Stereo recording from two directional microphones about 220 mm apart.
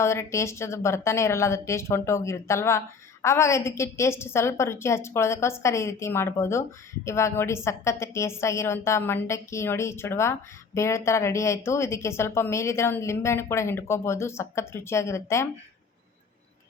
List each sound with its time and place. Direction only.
0.0 s a woman's voice: 10° left (ahead or behind)